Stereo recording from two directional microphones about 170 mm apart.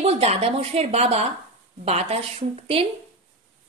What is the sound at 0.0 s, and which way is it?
A woman's voice, 35° right (ahead or behind).